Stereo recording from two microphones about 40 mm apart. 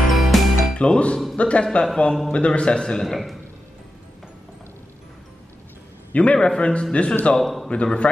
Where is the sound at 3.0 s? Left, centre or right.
Centre.